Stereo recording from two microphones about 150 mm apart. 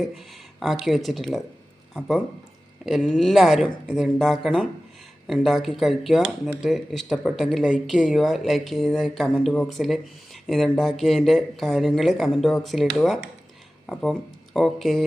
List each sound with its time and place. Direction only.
0.6 s speech: centre (ahead or behind)